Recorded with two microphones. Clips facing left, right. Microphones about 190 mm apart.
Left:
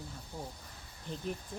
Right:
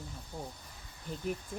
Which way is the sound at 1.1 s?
10° right (ahead or behind).